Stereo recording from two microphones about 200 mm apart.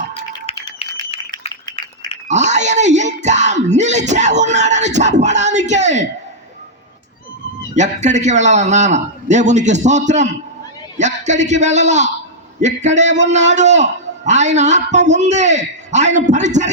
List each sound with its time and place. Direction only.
0.1 s a sound: 30° left (ahead or behind)
2.2 s a man's voice: 35° right (ahead or behind)
7.8 s a man's voice: 35° right (ahead or behind)